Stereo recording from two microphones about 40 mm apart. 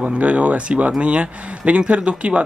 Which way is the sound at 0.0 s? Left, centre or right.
Right.